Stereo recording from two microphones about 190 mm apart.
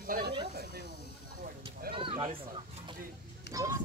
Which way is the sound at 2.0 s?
25° right (ahead or behind).